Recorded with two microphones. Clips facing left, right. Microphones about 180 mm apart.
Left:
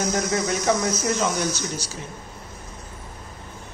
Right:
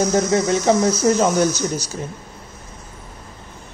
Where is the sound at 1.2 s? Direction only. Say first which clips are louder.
Right 7 dB; 40° right (ahead or behind).